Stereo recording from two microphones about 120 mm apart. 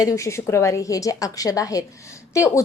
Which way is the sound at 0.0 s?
30° left (ahead or behind).